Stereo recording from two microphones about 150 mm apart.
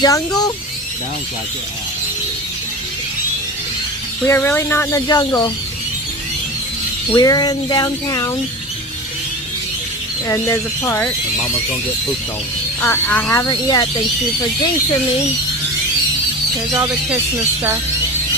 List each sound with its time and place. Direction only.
0.0 s speech: 25° left (ahead or behind)
4.3 s speech: 15° left (ahead or behind)
7.2 s speech: 25° left (ahead or behind)
10.2 s speech: 15° left (ahead or behind)
12.8 s speech: 15° left (ahead or behind)